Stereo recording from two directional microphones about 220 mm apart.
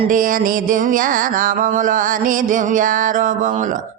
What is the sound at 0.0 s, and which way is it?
Music, 35° right (ahead or behind).